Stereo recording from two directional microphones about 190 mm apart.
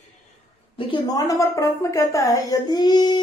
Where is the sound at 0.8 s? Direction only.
25° left (ahead or behind).